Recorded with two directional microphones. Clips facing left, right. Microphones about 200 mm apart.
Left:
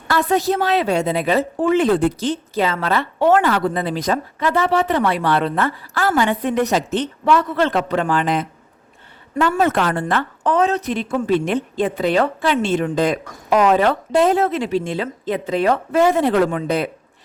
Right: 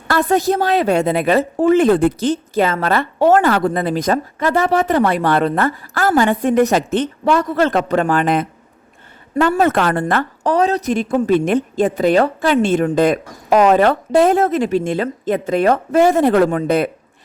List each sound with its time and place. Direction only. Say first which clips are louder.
0.1 s a woman's voice: right 2 dB; 50° right (ahead or behind)
9.3 s a woman's voice: right 3 dB; 35° right (ahead or behind)
9.6 s a woman's voice: right 3 dB; 55° right (ahead or behind)